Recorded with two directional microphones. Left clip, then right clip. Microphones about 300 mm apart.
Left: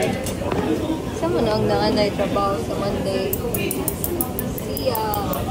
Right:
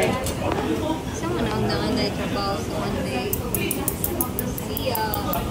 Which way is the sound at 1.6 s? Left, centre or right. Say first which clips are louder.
Left 5 dB; centre.